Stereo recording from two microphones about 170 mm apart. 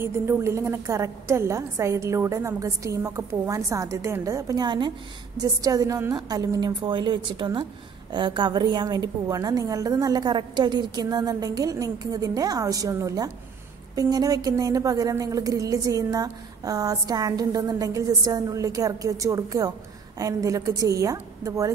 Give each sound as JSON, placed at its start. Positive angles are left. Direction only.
{"t": 0.0, "sound": "a woman's voice", "side_deg": -15}